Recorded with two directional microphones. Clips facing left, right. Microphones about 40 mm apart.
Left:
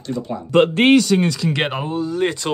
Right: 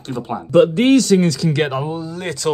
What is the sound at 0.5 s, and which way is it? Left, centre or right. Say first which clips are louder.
Speech: right 1 dB; left.